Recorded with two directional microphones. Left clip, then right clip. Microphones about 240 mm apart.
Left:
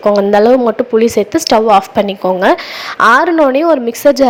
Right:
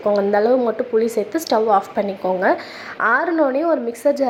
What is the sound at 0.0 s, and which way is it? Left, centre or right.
A woman's voice, left.